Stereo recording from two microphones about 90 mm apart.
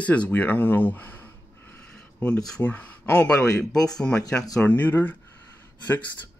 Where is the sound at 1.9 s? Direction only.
15° left (ahead or behind).